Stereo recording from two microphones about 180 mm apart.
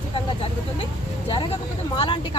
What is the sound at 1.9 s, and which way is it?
Speech, 30° left (ahead or behind).